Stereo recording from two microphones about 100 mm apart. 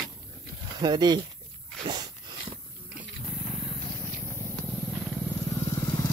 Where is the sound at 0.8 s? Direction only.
45° right (ahead or behind).